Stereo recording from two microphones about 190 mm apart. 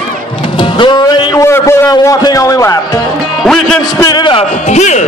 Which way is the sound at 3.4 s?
Centre (ahead or behind).